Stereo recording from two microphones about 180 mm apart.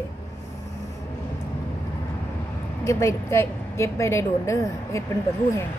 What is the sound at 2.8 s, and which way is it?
Speech, 15° left (ahead or behind).